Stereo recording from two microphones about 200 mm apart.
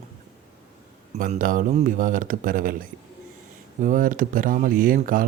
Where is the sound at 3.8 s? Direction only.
40° right (ahead or behind).